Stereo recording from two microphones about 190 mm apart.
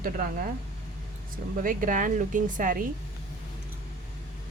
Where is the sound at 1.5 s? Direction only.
45° right (ahead or behind).